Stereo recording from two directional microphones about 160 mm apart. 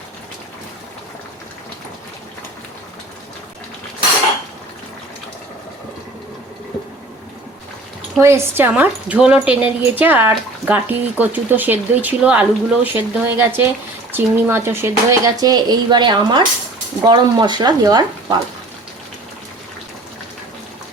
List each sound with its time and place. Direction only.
8.2 s speech: 15° right (ahead or behind)